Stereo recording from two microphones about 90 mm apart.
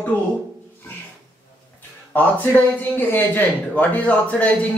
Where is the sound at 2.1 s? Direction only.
20° left (ahead or behind).